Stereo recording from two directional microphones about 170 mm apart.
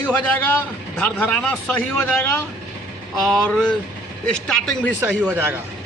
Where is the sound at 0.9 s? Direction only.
10° left (ahead or behind).